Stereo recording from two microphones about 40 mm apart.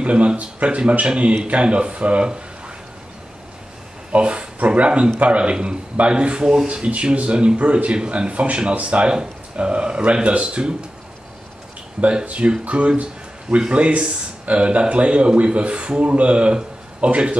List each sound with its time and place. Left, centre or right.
0.0 s speech: right
4.1 s speech: right
12.0 s speech: right